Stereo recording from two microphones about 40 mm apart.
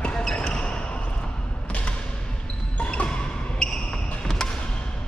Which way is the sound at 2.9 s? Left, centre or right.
Left.